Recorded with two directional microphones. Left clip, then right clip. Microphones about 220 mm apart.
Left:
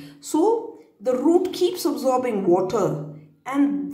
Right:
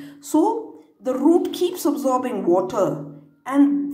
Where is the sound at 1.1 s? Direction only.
15° right (ahead or behind).